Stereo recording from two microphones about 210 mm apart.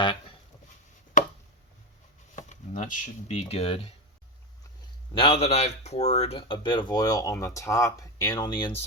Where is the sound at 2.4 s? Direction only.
35° left (ahead or behind).